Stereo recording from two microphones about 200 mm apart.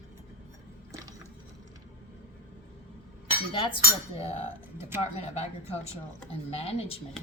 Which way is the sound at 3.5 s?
25° left (ahead or behind).